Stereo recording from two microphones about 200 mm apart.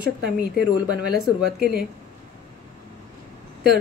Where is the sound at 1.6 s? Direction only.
5° right (ahead or behind).